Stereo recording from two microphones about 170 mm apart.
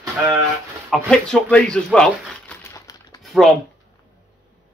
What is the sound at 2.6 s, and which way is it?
Coin, 20° left (ahead or behind).